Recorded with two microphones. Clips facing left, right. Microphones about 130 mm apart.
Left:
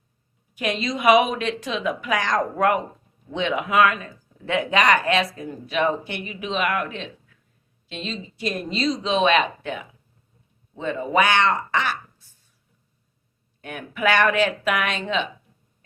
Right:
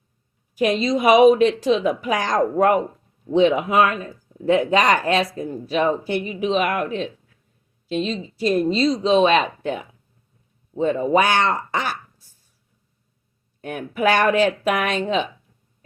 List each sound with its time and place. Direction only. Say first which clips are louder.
0.5 s speech: right 7 dB; 40° right (ahead or behind)
13.6 s speech: right 4 dB; 40° right (ahead or behind)